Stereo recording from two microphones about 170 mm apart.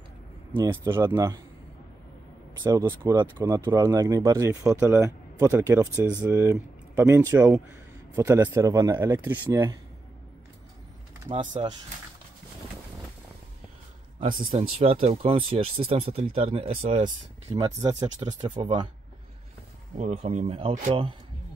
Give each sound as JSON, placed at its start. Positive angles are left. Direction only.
{"t": 0.5, "sound": "speech", "side_deg": -30}
{"t": 2.6, "sound": "speech", "side_deg": -25}
{"t": 11.3, "sound": "speech", "side_deg": -25}
{"t": 14.5, "sound": "speech", "side_deg": -30}
{"t": 17.5, "sound": "speech", "side_deg": -20}
{"t": 20.0, "sound": "speech", "side_deg": -40}